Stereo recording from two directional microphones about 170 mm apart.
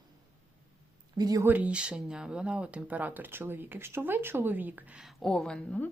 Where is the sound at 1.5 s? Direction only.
10° right (ahead or behind).